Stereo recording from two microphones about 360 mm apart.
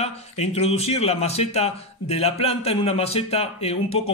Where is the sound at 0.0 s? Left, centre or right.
Centre.